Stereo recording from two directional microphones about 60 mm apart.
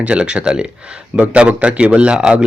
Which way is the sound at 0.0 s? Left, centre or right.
Centre.